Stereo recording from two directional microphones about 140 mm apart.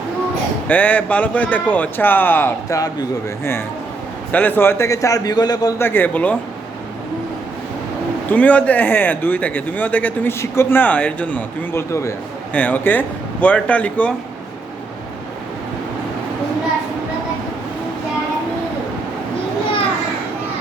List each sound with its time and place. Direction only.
0.7 s speech: 10° left (ahead or behind)
4.3 s a man's voice: 10° left (ahead or behind); by 5.7 s 30° left (ahead or behind)
5.8 s speech: 15° left (ahead or behind)
8.3 s speech: 10° left (ahead or behind)